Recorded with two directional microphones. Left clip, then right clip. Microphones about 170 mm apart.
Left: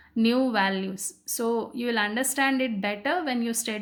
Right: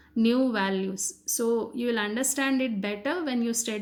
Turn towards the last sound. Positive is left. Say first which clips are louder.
# even
turn(degrees=15)  # may be behind; listen again after turning